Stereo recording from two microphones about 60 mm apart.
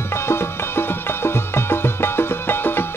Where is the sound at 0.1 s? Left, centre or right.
Left.